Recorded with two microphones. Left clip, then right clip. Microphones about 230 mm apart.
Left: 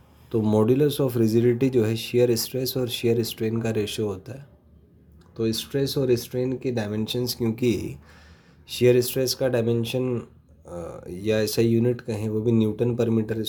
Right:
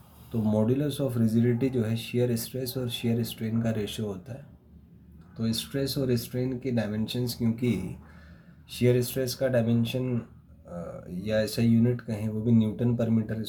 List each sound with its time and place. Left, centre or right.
0.3 s speech: left
5.4 s speech: left